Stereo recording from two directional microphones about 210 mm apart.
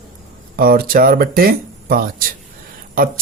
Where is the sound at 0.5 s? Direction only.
45° right (ahead or behind).